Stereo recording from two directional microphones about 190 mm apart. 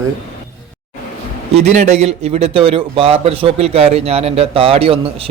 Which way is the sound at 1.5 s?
35° right (ahead or behind).